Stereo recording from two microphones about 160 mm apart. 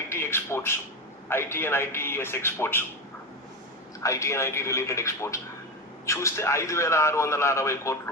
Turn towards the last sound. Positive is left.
turn(degrees=20)  # may be behind; listen again after turning